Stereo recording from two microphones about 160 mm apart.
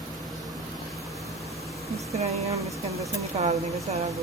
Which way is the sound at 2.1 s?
40° right (ahead or behind).